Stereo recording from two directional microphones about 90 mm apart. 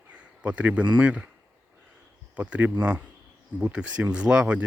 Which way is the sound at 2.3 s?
15° right (ahead or behind).